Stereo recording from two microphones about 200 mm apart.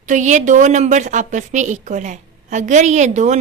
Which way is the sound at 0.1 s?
40° right (ahead or behind).